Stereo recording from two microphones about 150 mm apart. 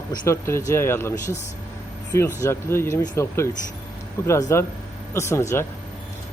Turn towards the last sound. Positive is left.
turn(degrees=20)  # may be behind; listen again after turning